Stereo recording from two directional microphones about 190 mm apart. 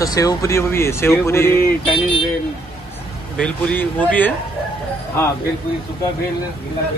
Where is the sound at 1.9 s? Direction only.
30° left (ahead or behind).